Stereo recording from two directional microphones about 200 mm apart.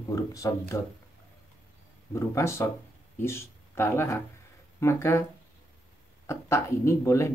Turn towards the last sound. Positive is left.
turn(degrees=15)  # may be behind; listen again after turning